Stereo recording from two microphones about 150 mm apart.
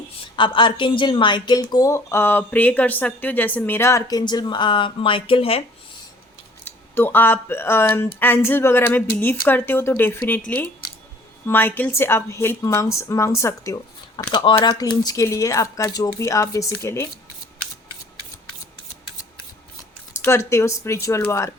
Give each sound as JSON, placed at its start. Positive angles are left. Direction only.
{"t": 0.3, "sound": "a woman's voice", "side_deg": 35}
{"t": 6.9, "sound": "a woman's voice", "side_deg": 15}
{"t": 20.1, "sound": "a woman's voice", "side_deg": 15}